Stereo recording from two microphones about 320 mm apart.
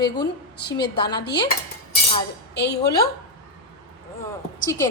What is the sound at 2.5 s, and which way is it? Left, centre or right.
Speech, left.